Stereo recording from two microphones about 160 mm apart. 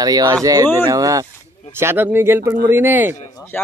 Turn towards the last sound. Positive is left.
turn(degrees=15)  # may be behind; listen again after turning